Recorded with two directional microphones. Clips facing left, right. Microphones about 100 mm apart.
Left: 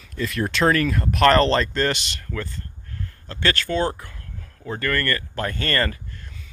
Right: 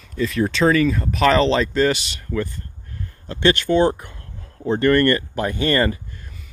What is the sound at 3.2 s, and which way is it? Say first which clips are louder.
Speech: right 7 dB; 20° right (ahead or behind).